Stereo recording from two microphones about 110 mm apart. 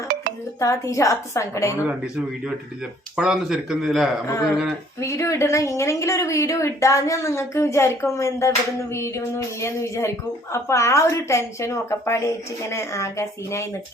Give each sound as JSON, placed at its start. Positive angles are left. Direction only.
{"t": 0.6, "sound": "a woman's voice", "side_deg": 30}
{"t": 3.2, "sound": "speech", "side_deg": -5}
{"t": 4.9, "sound": "a woman's voice", "side_deg": 25}